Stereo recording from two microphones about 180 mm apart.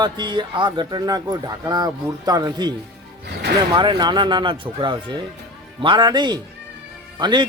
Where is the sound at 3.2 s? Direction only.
65° right (ahead or behind).